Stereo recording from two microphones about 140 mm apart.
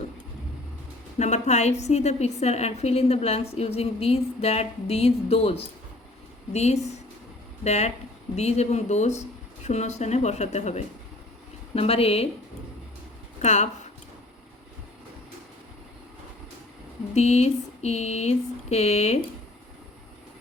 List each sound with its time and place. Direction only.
1.2 s a woman's voice: 55° left (ahead or behind)
13.4 s speech: 55° left (ahead or behind)
17.2 s a woman's voice: 50° left (ahead or behind)